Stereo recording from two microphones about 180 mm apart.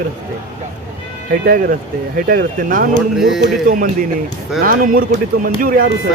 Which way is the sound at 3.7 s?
50° right (ahead or behind).